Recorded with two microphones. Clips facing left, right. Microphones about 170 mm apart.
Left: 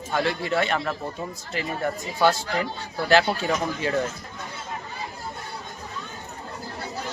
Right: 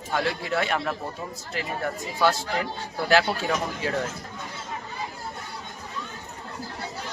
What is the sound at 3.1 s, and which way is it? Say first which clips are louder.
Speech: left 2 dB; 5° right (ahead or behind).